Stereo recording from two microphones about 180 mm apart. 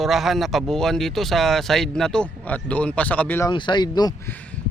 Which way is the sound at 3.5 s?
25° left (ahead or behind).